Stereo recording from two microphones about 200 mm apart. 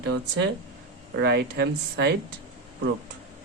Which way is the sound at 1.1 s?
55° right (ahead or behind).